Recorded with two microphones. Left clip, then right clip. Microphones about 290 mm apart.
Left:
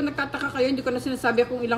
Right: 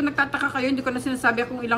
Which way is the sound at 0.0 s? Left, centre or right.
Right.